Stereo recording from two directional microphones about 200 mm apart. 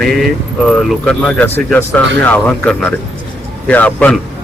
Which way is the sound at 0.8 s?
Centre (ahead or behind).